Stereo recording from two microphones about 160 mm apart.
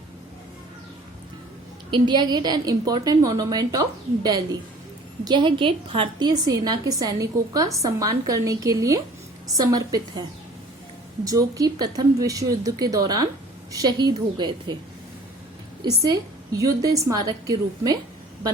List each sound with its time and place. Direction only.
1.9 s a woman's voice: 30° right (ahead or behind)
11.3 s a woman's voice: 20° right (ahead or behind)
16.0 s a woman's voice: 20° right (ahead or behind)